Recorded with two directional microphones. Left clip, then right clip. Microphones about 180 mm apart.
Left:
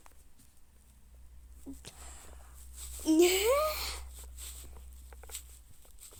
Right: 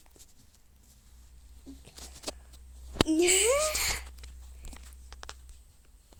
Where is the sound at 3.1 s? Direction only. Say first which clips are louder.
Left 1 dB; 10° left (ahead or behind).